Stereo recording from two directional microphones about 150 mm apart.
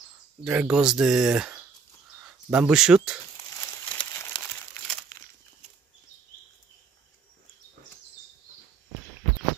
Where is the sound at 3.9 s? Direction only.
15° left (ahead or behind).